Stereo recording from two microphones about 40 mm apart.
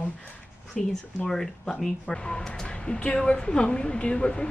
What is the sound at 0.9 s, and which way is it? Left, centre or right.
Speech, centre.